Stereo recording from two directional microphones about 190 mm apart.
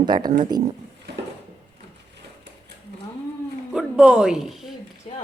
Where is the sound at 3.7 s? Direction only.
5° right (ahead or behind).